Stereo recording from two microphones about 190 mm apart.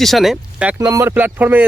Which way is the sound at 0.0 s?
Centre (ahead or behind).